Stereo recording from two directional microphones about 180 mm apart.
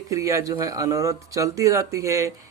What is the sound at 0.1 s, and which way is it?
Speech, 15° right (ahead or behind).